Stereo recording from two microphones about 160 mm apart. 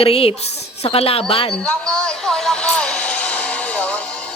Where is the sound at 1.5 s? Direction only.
5° left (ahead or behind).